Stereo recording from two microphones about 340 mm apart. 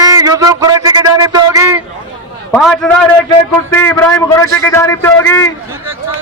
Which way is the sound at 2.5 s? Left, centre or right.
Centre.